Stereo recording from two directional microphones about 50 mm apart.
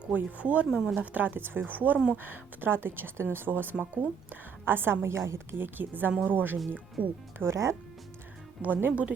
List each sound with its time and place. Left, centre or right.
0.2 s speech: right
0.7 s speech: centre
0.9 s a woman's voice: right
5.5 s speech: right
7.5 s speech: right
8.6 s speech: right